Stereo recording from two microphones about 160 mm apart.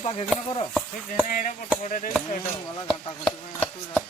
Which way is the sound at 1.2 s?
55° left (ahead or behind).